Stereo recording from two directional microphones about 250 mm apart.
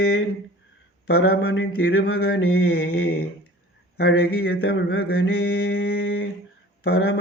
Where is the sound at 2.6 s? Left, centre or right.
Left.